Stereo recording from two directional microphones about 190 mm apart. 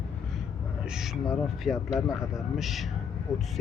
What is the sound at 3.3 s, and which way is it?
Speech, 20° left (ahead or behind).